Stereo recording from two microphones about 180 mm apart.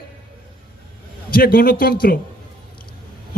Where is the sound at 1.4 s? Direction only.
55° left (ahead or behind).